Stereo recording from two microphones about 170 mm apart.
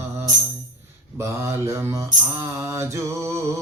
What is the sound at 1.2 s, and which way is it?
Mantra, 15° right (ahead or behind).